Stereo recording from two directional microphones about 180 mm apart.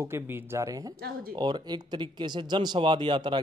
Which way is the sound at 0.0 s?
15° right (ahead or behind).